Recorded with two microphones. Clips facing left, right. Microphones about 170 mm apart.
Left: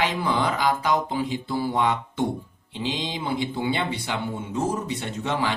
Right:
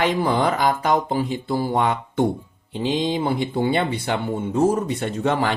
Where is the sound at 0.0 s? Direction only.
50° right (ahead or behind).